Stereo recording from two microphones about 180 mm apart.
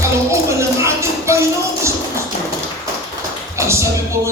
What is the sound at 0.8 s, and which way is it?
Music, 15° right (ahead or behind).